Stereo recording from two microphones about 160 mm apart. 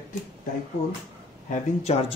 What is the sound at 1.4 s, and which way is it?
Speech, 45° left (ahead or behind).